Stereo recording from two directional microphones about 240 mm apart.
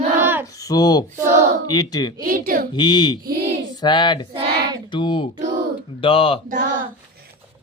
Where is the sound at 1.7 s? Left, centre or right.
Centre.